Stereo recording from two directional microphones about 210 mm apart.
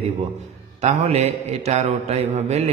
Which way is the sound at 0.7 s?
30° right (ahead or behind).